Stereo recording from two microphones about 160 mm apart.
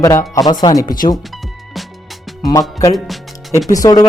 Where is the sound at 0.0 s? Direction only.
20° left (ahead or behind).